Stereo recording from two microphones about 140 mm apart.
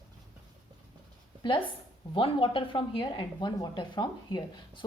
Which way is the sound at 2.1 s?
35° left (ahead or behind).